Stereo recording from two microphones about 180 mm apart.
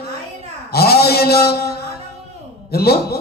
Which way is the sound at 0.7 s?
60° left (ahead or behind).